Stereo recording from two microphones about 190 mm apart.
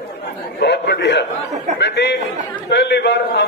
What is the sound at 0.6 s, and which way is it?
A man's voice, 65° left (ahead or behind).